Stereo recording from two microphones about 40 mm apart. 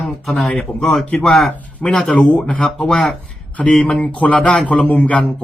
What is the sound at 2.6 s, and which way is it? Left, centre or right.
Speech, centre.